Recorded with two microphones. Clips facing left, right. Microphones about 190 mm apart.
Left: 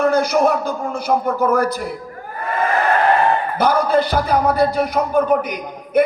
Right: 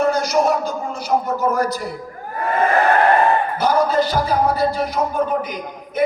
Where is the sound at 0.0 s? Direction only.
55° left (ahead or behind).